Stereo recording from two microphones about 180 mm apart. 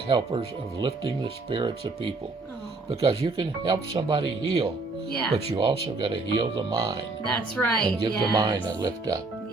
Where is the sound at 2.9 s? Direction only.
30° right (ahead or behind).